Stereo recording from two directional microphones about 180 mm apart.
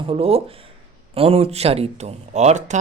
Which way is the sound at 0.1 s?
30° right (ahead or behind).